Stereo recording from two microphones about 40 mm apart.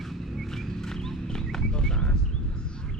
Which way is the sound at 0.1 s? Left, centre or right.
Centre.